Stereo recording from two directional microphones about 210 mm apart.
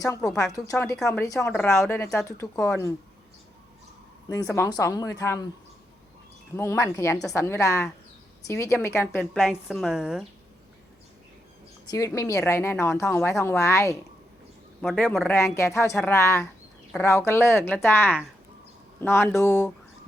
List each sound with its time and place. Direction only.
0.3 s speech: 15° left (ahead or behind)
4.3 s speech: 15° left (ahead or behind)
6.6 s speech: 15° left (ahead or behind); by 10.2 s 5° right (ahead or behind)
11.9 s speech: 15° left (ahead or behind)
14.8 s speech: centre (ahead or behind)
15.3 s speech: 15° left (ahead or behind)